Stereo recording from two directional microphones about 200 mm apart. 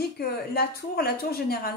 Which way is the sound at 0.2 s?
50° left (ahead or behind).